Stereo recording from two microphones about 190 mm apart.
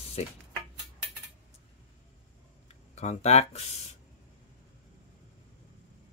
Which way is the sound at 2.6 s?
35° left (ahead or behind).